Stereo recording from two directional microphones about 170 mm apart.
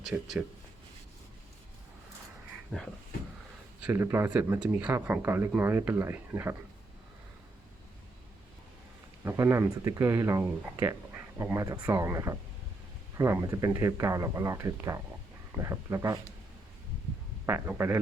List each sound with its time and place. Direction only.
0.1 s speech: 5° right (ahead or behind)
3.8 s speech: 10° right (ahead or behind)
9.2 s speech: 15° right (ahead or behind)
17.4 s speech: 15° right (ahead or behind)